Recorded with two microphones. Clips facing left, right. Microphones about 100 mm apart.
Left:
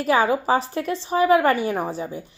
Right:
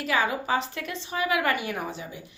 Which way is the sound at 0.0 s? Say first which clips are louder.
Left 7 dB; 40° left (ahead or behind).